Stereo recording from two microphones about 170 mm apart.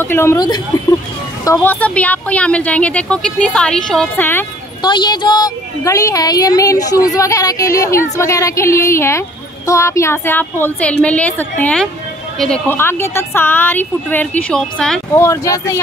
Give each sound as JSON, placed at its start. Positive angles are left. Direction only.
{"t": 0.0, "sound": "speech", "side_deg": 15}
{"t": 4.8, "sound": "a woman's voice", "side_deg": 25}
{"t": 15.1, "sound": "speech", "side_deg": 20}